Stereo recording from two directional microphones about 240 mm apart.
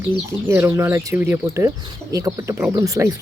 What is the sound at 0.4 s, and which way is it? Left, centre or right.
Speech, centre.